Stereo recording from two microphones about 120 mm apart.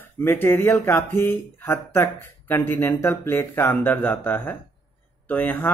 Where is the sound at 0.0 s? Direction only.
20° left (ahead or behind).